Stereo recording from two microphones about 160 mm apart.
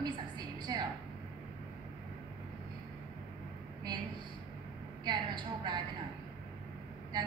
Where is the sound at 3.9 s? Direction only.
25° right (ahead or behind).